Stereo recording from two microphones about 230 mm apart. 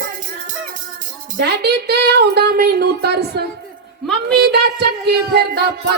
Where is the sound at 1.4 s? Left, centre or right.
Right.